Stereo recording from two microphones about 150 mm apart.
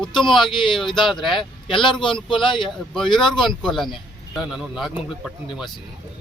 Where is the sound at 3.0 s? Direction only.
30° left (ahead or behind).